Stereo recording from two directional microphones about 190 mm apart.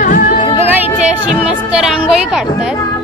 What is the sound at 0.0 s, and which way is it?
Music, 45° left (ahead or behind).